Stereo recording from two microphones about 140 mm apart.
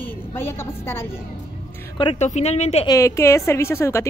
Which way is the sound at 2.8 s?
20° left (ahead or behind).